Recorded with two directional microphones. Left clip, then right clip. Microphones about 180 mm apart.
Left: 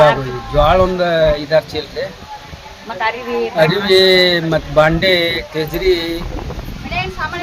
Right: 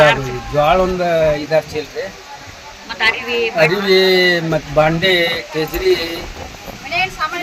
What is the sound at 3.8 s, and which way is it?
Speech, 5° right (ahead or behind).